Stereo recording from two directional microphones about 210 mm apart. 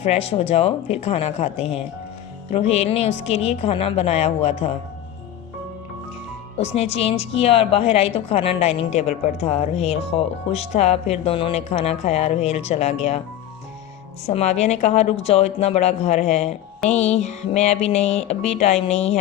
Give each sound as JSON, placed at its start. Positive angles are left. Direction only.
{"t": 0.0, "sound": "a woman's voice", "side_deg": 30}
{"t": 6.6, "sound": "a woman's voice", "side_deg": 30}
{"t": 14.3, "sound": "a woman's voice", "side_deg": 30}